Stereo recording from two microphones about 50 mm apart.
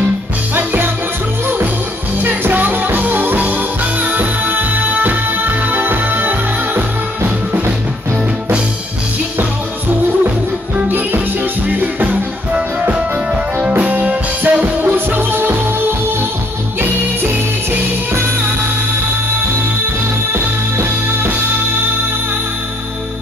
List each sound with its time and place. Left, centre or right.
2.2 s music: right
13.6 s music: right
20.3 s music: right